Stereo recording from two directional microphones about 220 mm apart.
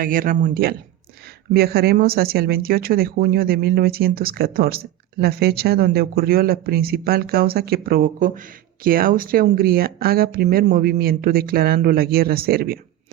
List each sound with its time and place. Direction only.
0.0 s a man's voice: 40° right (ahead or behind)